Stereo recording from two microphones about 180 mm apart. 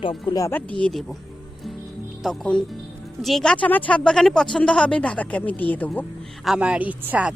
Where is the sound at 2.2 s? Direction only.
Centre (ahead or behind).